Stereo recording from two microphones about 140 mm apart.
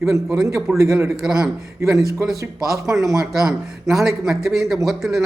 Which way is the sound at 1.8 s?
20° right (ahead or behind).